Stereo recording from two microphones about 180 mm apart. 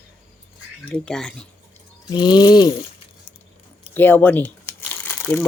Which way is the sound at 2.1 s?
25° left (ahead or behind).